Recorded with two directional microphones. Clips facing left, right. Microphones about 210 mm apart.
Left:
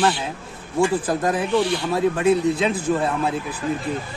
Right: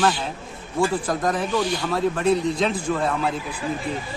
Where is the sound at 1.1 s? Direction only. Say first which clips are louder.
Left 2 dB; 10° left (ahead or behind).